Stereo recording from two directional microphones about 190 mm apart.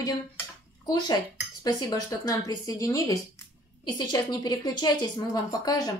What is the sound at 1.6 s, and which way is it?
A woman's voice, 20° left (ahead or behind).